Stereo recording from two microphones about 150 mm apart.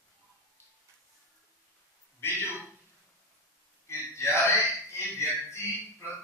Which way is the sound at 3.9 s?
15° left (ahead or behind).